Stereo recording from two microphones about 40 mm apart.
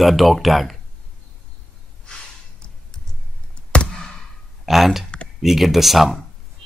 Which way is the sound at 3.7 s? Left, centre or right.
Left.